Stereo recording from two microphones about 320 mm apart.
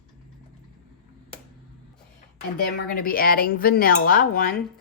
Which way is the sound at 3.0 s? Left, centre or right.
Left.